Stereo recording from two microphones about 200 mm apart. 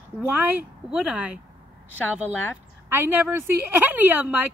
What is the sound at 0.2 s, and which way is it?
A woman's voice, 5° right (ahead or behind).